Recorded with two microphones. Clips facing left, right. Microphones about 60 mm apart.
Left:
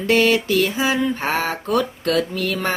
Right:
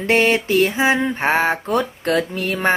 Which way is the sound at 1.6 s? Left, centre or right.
Right.